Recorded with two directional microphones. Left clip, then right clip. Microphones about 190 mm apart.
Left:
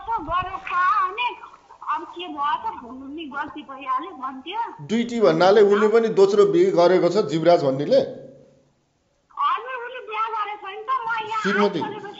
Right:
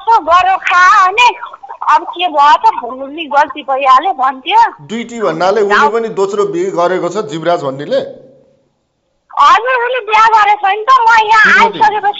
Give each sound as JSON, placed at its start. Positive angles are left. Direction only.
{"t": 0.0, "sound": "a sound", "side_deg": -50}
{"t": 1.9, "sound": "a woman's voice", "side_deg": -50}
{"t": 4.8, "sound": "a man's voice", "side_deg": 10}
{"t": 9.3, "sound": "a woman's voice", "side_deg": -50}